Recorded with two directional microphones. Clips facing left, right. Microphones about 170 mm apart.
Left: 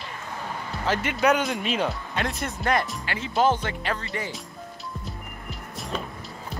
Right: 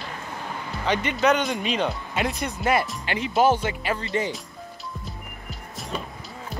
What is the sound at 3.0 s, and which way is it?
Speech, 15° right (ahead or behind).